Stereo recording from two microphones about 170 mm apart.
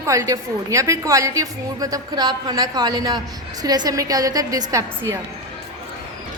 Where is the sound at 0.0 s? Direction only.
20° right (ahead or behind).